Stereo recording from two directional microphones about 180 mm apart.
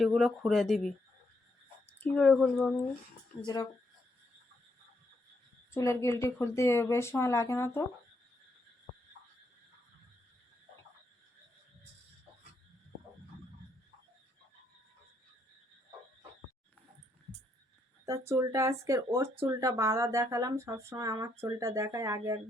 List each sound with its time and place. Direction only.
0.0 s speech: centre (ahead or behind)
2.0 s speech: 5° left (ahead or behind)
3.4 s speech: 20° left (ahead or behind)
5.7 s speech: 15° left (ahead or behind)
18.0 s speech: 15° right (ahead or behind)